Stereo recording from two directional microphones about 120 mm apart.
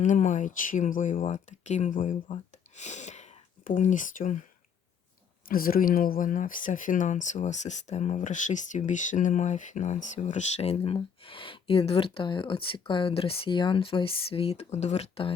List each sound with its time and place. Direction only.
0.0 s speech: 90° left
2.2 s speech: 70° left (ahead or behind); by 4.4 s 90° left
6.2 s speech: 90° left; by 10.9 s 60° left (ahead or behind)
10.9 s speech: 45° left (ahead or behind)